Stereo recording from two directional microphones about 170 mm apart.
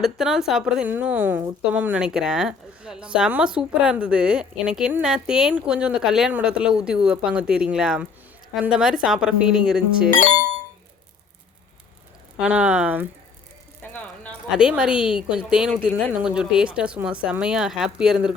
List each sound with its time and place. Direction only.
0.0 s a woman's voice: centre (ahead or behind)
12.4 s speech: 5° right (ahead or behind)
13.8 s music: 10° left (ahead or behind)
14.5 s a woman's voice: 5° right (ahead or behind)